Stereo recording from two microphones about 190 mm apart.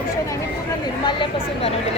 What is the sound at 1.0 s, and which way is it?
Speech, 25° left (ahead or behind).